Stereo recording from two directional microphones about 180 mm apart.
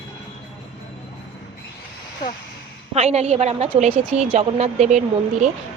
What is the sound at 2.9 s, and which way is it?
A woman's voice, 35° right (ahead or behind).